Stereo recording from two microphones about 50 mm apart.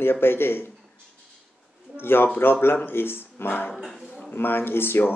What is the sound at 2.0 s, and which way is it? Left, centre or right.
Speech, left.